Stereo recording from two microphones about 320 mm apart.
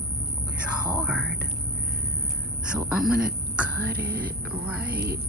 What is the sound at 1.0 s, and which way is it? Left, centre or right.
Speech, centre.